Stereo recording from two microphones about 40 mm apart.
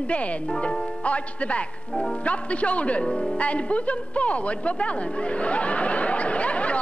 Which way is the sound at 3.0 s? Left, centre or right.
Centre.